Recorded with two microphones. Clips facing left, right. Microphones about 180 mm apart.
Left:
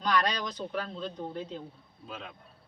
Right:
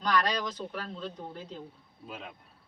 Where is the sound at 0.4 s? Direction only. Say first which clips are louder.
Left 1 dB; 5° right (ahead or behind).